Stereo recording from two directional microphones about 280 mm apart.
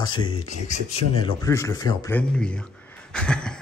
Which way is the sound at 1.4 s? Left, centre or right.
Centre.